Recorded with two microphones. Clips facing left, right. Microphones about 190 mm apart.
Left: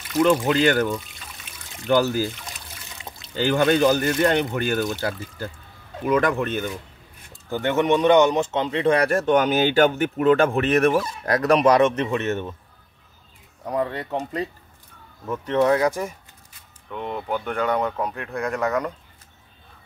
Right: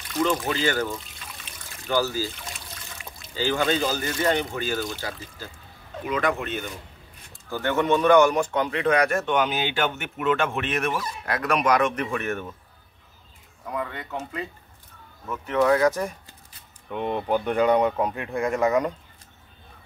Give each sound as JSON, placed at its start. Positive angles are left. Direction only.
{"t": 0.1, "sound": "speech", "side_deg": 65}
{"t": 2.0, "sound": "speech", "side_deg": 60}
{"t": 3.3, "sound": "speech", "side_deg": 60}
{"t": 6.0, "sound": "speech", "side_deg": 45}
{"t": 7.4, "sound": "speech", "side_deg": 20}
{"t": 13.7, "sound": "speech", "side_deg": 35}
{"t": 15.9, "sound": "speech", "side_deg": 5}
{"t": 16.9, "sound": "speech", "side_deg": -10}